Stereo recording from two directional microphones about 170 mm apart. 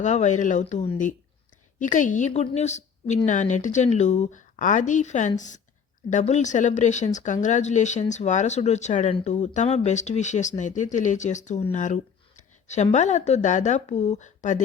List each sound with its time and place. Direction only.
0.0 s speech: 45° left (ahead or behind)